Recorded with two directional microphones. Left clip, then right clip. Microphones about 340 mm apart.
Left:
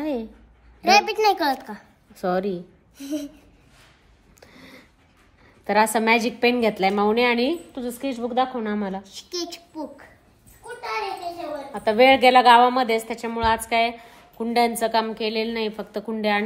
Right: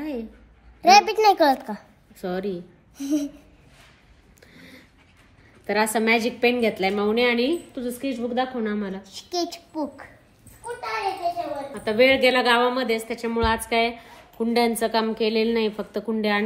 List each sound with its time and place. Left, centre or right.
0.0 s babbling: centre
0.8 s a child's voice: centre
2.1 s a woman's voice: centre
3.0 s a child's voice: centre
4.4 s a sound: centre
5.7 s a woman's voice: centre
9.0 s a child's voice: centre
11.7 s a woman's voice: centre